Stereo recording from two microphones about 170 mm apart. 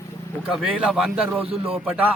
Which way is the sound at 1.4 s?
35° right (ahead or behind).